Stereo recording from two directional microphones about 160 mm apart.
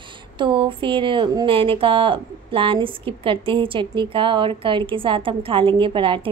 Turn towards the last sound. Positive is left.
turn(degrees=-30)  # may be behind; listen again after turning